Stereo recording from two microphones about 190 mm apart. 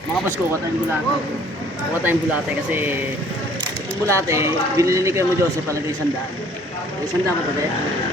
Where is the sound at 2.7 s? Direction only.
10° right (ahead or behind).